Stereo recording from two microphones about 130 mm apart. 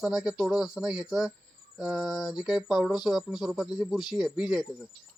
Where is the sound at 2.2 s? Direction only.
30° left (ahead or behind).